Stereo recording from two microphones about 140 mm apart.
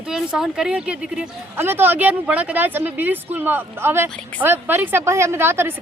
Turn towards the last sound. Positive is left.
turn(degrees=-15)  # may be behind; listen again after turning